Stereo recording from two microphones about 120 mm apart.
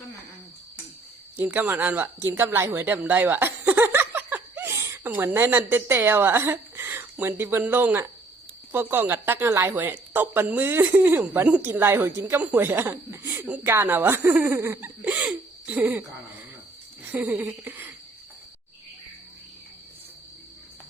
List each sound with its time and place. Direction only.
1.4 s speech: 15° right (ahead or behind)
15.0 s hiccup: 10° right (ahead or behind)
17.0 s speech: 15° right (ahead or behind)
17.4 s a sound: 15° right (ahead or behind)